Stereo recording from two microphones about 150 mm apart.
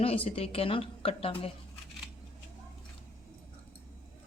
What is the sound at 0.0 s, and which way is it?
A woman's voice, 40° left (ahead or behind).